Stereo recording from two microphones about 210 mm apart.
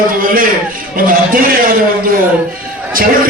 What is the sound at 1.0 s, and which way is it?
Speech, 40° right (ahead or behind).